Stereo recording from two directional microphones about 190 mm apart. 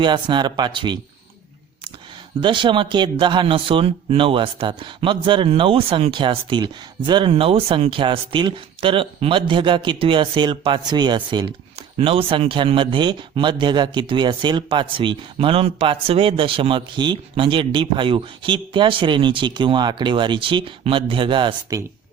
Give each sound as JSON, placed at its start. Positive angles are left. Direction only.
{"t": 0.0, "sound": "speech", "side_deg": -25}
{"t": 2.4, "sound": "speech", "side_deg": -25}